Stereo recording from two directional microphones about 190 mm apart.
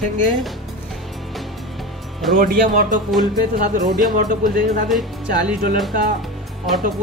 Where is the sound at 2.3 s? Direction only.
50° right (ahead or behind).